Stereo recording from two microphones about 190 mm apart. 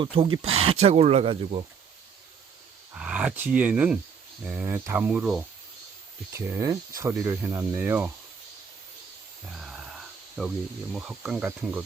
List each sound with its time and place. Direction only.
0.0 s speech: 25° right (ahead or behind)
2.9 s speech: 5° right (ahead or behind)
9.5 s snake: centre (ahead or behind)
10.9 s speech: 5° right (ahead or behind)